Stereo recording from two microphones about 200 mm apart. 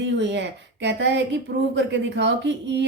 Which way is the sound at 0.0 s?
60° right (ahead or behind).